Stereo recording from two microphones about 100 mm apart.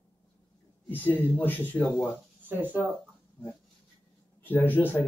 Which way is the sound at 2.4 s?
20° right (ahead or behind).